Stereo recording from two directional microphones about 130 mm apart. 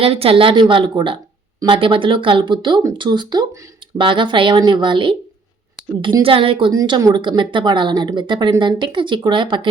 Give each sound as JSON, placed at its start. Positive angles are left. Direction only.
{"t": 0.0, "sound": "speech", "side_deg": -50}
{"t": 6.7, "sound": "speech", "side_deg": -30}